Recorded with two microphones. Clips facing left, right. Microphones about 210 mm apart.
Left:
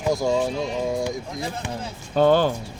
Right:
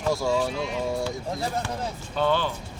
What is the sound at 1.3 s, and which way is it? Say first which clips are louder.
Speech: right 1 dB; 35° right (ahead or behind).